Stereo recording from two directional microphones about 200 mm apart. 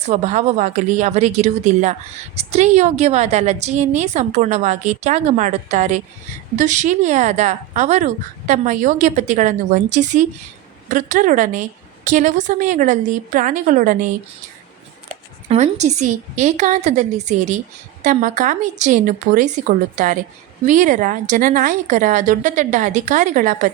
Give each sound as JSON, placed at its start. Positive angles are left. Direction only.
{"t": 0.1, "sound": "speech", "side_deg": -35}
{"t": 15.4, "sound": "speech", "side_deg": -35}